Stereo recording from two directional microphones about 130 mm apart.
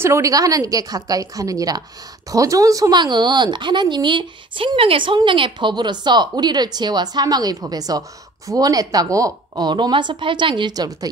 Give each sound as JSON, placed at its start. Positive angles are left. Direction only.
{"t": 0.0, "sound": "a woman's voice", "side_deg": -25}